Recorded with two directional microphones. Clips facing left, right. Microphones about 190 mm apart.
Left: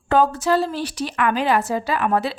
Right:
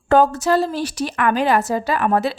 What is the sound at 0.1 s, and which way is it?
A woman's voice, 45° right (ahead or behind).